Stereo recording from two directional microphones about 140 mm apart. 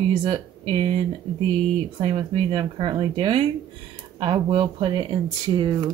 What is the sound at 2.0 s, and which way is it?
Speech, 35° right (ahead or behind).